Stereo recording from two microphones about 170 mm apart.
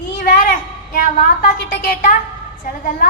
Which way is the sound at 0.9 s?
55° left (ahead or behind).